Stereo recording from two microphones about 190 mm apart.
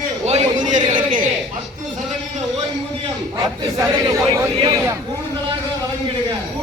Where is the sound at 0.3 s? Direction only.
40° right (ahead or behind).